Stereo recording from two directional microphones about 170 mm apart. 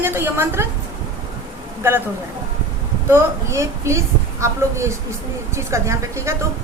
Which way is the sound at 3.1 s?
15° right (ahead or behind).